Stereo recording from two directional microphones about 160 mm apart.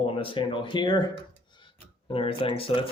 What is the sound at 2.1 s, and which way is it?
Speech, 35° left (ahead or behind).